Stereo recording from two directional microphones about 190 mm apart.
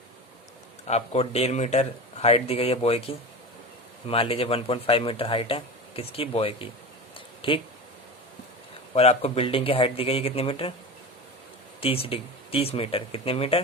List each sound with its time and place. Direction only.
0.9 s speech: 35° left (ahead or behind)
9.0 s speech: 30° left (ahead or behind)
11.8 s speech: 30° left (ahead or behind)